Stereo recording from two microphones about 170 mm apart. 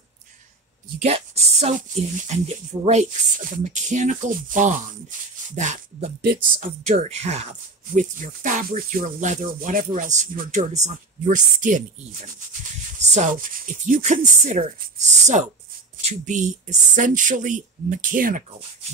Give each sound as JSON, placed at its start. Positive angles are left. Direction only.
{"t": 1.0, "sound": "speech", "side_deg": -40}
{"t": 13.1, "sound": "speech", "side_deg": -50}